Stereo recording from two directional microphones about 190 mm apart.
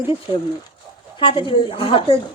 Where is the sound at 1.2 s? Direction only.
25° left (ahead or behind).